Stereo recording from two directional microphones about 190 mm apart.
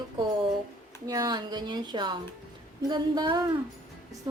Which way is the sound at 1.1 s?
20° right (ahead or behind).